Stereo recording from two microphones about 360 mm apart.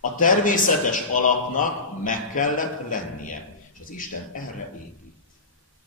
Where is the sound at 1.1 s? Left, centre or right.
Left.